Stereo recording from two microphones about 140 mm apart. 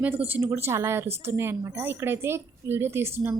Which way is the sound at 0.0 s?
10° right (ahead or behind).